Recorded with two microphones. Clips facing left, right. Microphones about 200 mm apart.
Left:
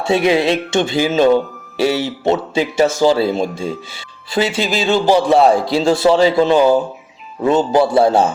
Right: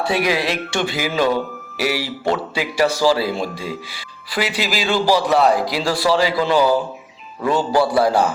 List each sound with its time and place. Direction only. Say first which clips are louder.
0.0 s speech: left 5 dB; 25° left (ahead or behind)